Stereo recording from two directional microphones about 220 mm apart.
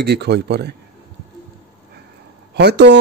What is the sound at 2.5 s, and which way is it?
Speech, 50° right (ahead or behind).